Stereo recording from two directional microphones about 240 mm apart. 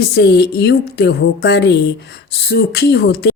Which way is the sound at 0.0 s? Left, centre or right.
Left.